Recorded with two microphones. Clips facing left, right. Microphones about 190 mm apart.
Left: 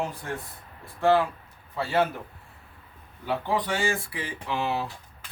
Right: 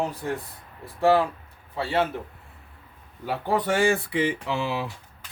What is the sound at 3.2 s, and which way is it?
Speech, 40° right (ahead or behind).